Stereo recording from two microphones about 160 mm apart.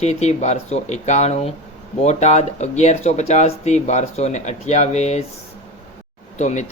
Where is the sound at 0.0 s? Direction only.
45° left (ahead or behind).